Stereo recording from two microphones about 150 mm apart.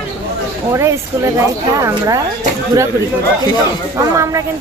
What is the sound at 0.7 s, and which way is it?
Speech, 20° right (ahead or behind).